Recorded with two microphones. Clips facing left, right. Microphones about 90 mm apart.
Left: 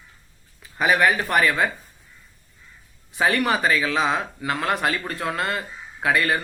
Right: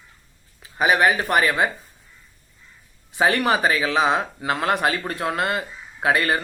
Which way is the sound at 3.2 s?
25° right (ahead or behind).